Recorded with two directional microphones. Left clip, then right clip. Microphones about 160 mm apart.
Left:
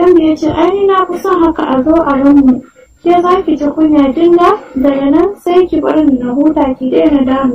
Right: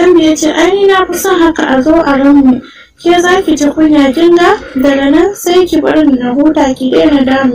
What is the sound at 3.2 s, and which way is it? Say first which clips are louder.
A woman's voice: right 2 dB; 35° right (ahead or behind).